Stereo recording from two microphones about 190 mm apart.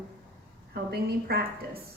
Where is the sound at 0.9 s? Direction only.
55° right (ahead or behind).